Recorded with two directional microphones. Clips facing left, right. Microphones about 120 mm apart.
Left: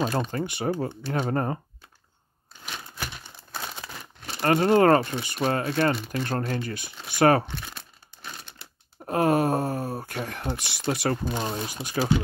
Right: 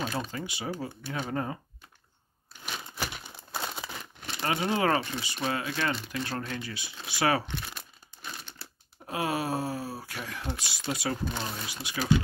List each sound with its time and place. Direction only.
0.1 s speech: 50° left (ahead or behind)
2.6 s a sound: 5° right (ahead or behind)
3.5 s crumpling: 5° right (ahead or behind)
4.4 s speech: 50° left (ahead or behind)
9.0 s speech: 50° left (ahead or behind)